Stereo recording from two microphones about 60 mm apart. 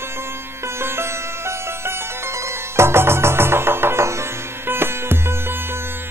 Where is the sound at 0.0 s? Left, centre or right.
Right.